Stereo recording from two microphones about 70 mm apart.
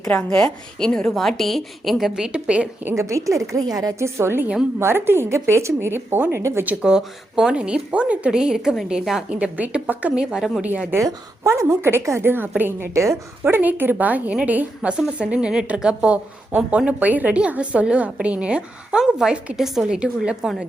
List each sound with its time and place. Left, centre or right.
0.1 s a woman's voice: left; by 2.6 s centre
2.9 s a woman's voice: right
4.0 s a woman's voice: right
6.8 s a woman's voice: centre
10.2 s a woman's voice: centre
11.0 s a woman's voice: right
12.9 s a woman's voice: right
13.5 s a woman's voice: right